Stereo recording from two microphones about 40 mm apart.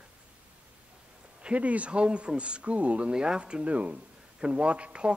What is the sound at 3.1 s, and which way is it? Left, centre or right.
Speech, right.